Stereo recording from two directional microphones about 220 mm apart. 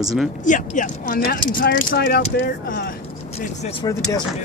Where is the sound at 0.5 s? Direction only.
35° left (ahead or behind).